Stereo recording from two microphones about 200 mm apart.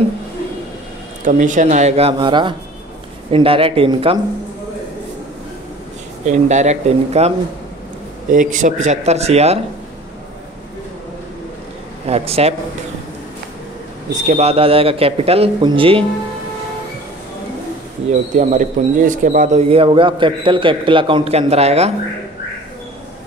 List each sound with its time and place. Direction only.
1.2 s a man's voice: 40° right (ahead or behind)
6.2 s a man's voice: 35° right (ahead or behind)
12.1 s a man's voice: 30° right (ahead or behind)
14.2 s a man's voice: 30° right (ahead or behind)
18.3 s a man's voice: 40° right (ahead or behind)